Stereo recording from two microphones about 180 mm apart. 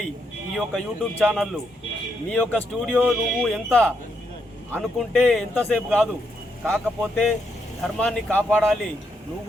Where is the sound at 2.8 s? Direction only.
5° right (ahead or behind).